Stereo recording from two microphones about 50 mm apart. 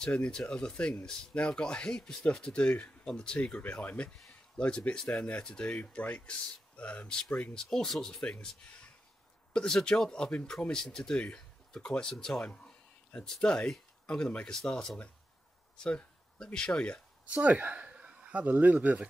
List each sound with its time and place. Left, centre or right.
0.0 s speech: centre
7.6 s speech: centre
8.2 s speech: centre
15.8 s a sound: centre
16.5 s speech: centre
17.3 s a sound: right
18.4 s speech: right